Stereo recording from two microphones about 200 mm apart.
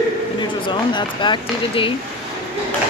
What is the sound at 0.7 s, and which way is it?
Speech, 25° left (ahead or behind).